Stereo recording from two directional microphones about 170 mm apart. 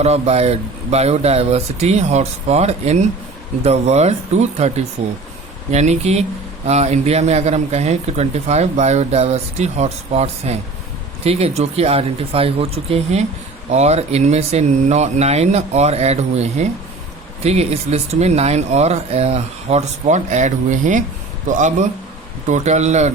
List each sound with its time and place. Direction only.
0.0 s a man's voice: 40° right (ahead or behind)